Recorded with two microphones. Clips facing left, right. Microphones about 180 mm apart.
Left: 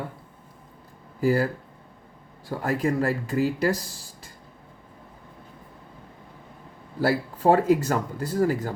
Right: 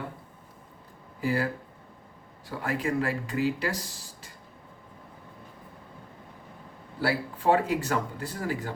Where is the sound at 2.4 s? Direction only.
40° left (ahead or behind).